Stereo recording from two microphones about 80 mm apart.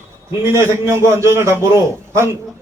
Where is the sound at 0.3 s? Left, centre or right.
Right.